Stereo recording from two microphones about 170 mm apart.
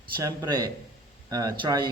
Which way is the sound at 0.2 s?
25° right (ahead or behind).